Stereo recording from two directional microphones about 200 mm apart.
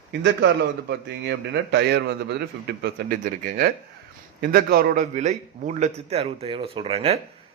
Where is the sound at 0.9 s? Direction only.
60° right (ahead or behind); by 7.2 s 30° right (ahead or behind).